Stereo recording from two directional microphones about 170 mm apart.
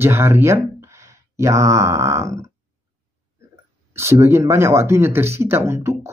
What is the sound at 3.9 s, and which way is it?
Speech, 15° right (ahead or behind).